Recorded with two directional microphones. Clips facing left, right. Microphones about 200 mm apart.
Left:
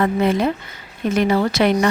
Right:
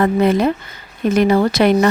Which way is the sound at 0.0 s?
40° right (ahead or behind).